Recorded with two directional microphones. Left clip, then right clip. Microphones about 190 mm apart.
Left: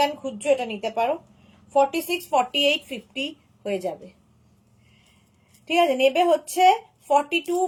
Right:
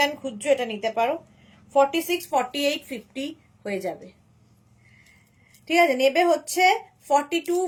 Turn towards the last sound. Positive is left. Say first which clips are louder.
# left 1 dB
turn(degrees=-20)  # may be behind; listen again after turning